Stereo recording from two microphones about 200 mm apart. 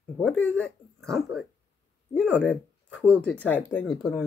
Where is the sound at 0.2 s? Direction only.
5° left (ahead or behind).